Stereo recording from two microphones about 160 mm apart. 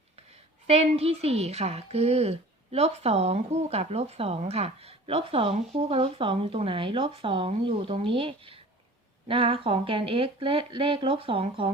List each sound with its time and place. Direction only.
0.7 s a woman's voice: 40° right (ahead or behind)